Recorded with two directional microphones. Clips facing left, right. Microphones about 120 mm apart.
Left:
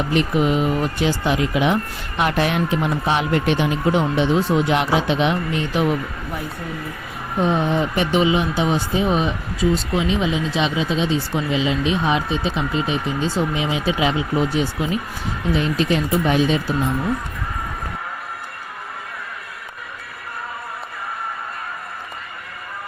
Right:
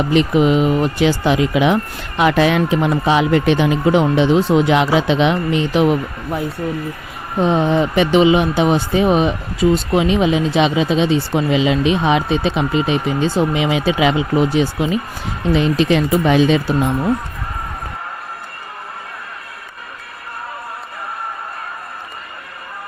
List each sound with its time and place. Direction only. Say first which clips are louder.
0.1 s speech: right 5 dB; 90° right
7.5 s speech: right 8 dB; 90° right